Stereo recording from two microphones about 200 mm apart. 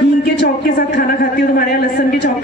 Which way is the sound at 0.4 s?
50° left (ahead or behind).